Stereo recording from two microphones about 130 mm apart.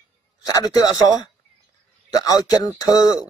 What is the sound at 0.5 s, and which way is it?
Speech, 30° left (ahead or behind).